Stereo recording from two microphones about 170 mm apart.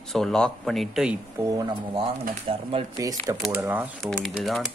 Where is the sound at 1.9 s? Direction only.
30° right (ahead or behind).